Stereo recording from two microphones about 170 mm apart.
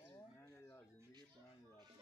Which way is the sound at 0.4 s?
15° left (ahead or behind).